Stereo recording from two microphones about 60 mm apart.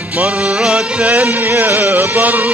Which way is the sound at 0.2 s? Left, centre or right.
Centre.